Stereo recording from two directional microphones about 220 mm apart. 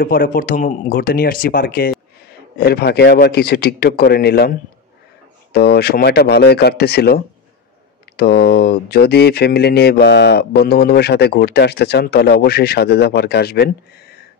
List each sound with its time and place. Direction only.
0.0 s speech: 40° left (ahead or behind)